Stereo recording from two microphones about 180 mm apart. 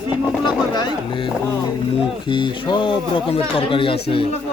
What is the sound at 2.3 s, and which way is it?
Speech, 25° left (ahead or behind).